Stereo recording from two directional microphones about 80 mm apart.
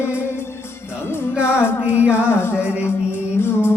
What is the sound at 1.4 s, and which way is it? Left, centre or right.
Music, left.